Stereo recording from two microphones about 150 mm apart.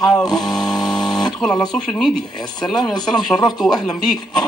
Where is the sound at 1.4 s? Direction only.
Centre (ahead or behind).